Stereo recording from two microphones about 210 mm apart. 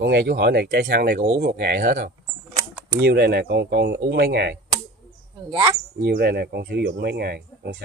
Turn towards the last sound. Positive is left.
turn(degrees=-50)  # may be behind; listen again after turning